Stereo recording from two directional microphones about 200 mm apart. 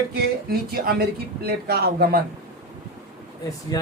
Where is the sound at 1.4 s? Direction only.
50° right (ahead or behind).